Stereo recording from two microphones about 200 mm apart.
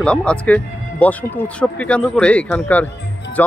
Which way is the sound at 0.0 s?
5° left (ahead or behind).